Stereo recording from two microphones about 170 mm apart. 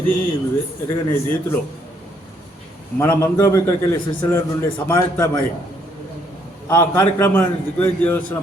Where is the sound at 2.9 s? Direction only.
15° left (ahead or behind).